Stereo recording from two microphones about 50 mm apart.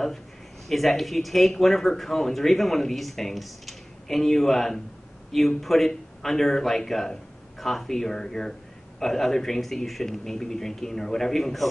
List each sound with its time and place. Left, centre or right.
0.7 s speech: centre